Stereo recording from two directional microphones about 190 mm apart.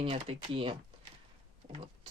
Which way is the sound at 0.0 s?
30° right (ahead or behind).